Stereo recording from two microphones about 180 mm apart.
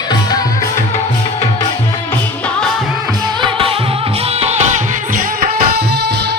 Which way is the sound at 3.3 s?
25° right (ahead or behind).